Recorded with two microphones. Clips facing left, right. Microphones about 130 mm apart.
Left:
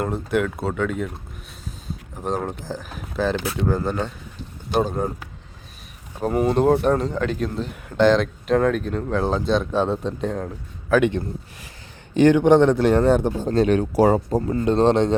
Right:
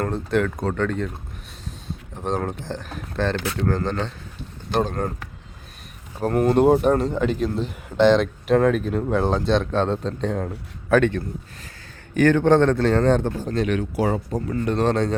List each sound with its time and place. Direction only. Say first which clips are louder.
0.0 s a man's voice: even; 5° left (ahead or behind)
6.1 s speech: right 1 dB; centre (ahead or behind)
10.3 s a man's voice: right 1 dB; centre (ahead or behind)
12.1 s a man's voice: left 2 dB; 20° left (ahead or behind)
13.5 s a man's voice: left 6 dB; 35° left (ahead or behind)